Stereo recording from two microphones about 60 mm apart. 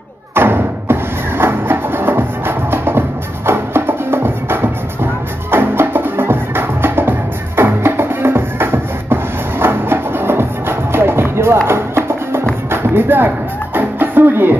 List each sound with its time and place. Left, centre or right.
0.3 s thump: right
1.4 s music: right